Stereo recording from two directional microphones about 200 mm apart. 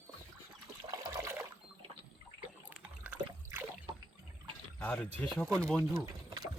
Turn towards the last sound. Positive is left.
turn(degrees=0)  # may be behind; listen again after turning